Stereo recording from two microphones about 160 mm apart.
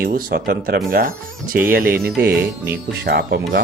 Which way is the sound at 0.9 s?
60° right (ahead or behind).